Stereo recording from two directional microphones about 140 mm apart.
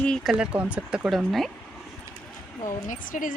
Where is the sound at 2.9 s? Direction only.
70° left (ahead or behind).